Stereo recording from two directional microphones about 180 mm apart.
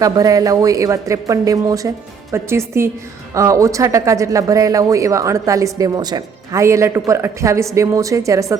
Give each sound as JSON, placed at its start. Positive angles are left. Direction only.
{"t": 0.0, "sound": "a woman's voice", "side_deg": -20}